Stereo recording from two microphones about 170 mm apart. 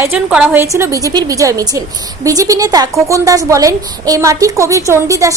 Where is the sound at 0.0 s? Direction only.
5° right (ahead or behind).